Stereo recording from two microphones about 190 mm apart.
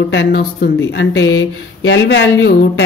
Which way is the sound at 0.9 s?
75° left (ahead or behind).